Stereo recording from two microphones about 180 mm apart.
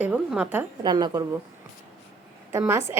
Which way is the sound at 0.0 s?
5° right (ahead or behind).